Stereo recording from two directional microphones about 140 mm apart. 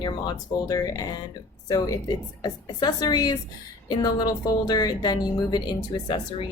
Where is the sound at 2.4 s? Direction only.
30° left (ahead or behind).